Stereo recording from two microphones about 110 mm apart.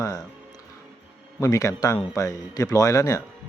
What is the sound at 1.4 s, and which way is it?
Speech, 30° left (ahead or behind).